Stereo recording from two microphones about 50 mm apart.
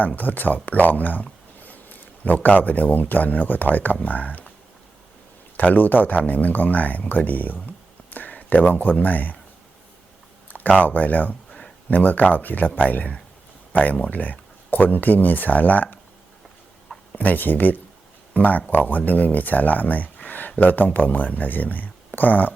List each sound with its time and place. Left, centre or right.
0.2 s speech: left
5.5 s speech: left
10.8 s speech: left
17.2 s speech: left